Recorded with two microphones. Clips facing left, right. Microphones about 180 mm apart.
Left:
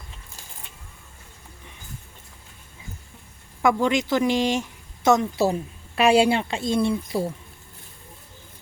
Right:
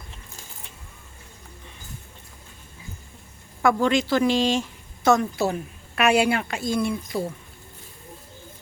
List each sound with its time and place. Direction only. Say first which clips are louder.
3.6 s speech: even; 15° left (ahead or behind)
6.0 s speech: left 2 dB; 30° left (ahead or behind)